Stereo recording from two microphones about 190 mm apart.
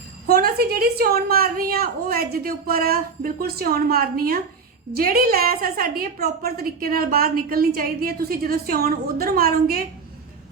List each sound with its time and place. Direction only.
0.3 s a woman's voice: 55° right (ahead or behind)